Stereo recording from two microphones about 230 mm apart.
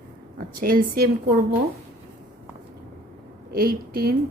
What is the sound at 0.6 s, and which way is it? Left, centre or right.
A woman's voice, right.